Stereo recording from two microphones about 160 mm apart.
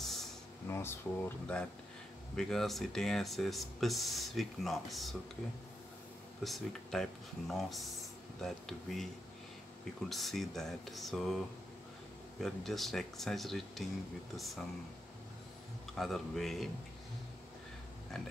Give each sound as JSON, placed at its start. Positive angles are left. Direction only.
{"t": 0.0, "sound": "a sound", "side_deg": 0}
{"t": 0.7, "sound": "speech", "side_deg": 15}
{"t": 2.3, "sound": "speech", "side_deg": 0}
{"t": 6.4, "sound": "speech", "side_deg": 0}
{"t": 15.9, "sound": "speech", "side_deg": 0}